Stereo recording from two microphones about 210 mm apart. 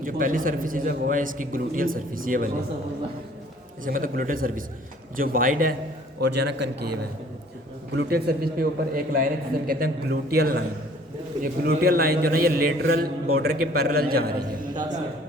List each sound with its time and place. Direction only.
0.0 s a man's voice: 40° right (ahead or behind)
3.8 s a man's voice: 40° right (ahead or behind)